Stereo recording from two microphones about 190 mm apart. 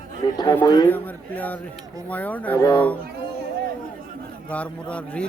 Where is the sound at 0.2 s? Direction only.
25° left (ahead or behind).